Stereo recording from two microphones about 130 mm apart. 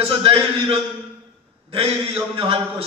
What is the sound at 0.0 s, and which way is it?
Speech, 45° right (ahead or behind).